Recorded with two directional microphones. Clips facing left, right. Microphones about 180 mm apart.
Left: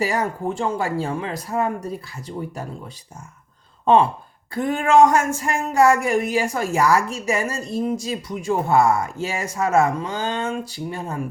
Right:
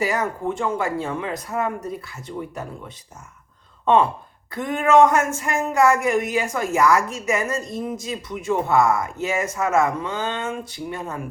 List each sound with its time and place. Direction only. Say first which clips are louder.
0.0 s speech: left 1 dB; 30° left (ahead or behind)
4.5 s speech: even; 30° left (ahead or behind)